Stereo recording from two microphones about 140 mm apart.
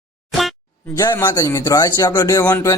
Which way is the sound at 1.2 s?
25° left (ahead or behind).